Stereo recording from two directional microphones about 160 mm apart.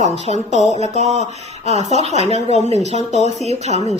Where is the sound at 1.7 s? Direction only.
45° right (ahead or behind).